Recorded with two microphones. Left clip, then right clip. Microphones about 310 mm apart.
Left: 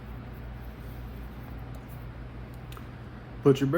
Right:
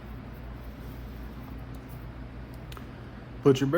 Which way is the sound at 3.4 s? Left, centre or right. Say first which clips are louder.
Even; right.